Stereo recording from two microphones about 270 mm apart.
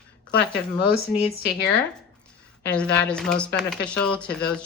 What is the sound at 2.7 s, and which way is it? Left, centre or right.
A woman's voice, centre.